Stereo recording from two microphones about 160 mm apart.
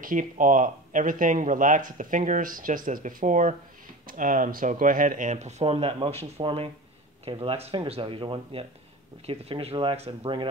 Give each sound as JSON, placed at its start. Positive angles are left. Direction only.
{"t": 0.0, "sound": "speech", "side_deg": -55}